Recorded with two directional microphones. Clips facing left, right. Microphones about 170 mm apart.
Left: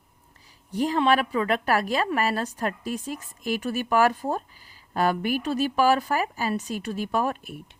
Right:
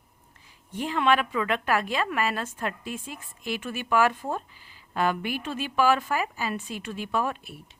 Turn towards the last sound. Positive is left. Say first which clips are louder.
# left 3 dB
turn(degrees=50)  # may be behind; listen again after turning